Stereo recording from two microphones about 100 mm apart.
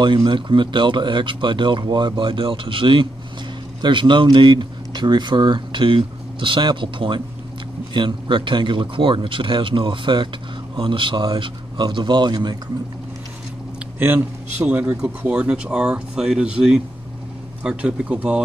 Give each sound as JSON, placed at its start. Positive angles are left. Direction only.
{"t": 0.0, "sound": "speech", "side_deg": -55}
{"t": 13.9, "sound": "speech", "side_deg": -20}